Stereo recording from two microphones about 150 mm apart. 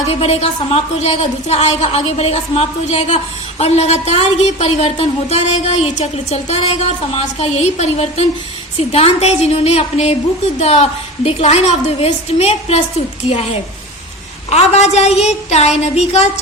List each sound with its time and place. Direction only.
0.1 s a woman's voice: 45° left (ahead or behind)
14.5 s a woman's voice: 45° left (ahead or behind)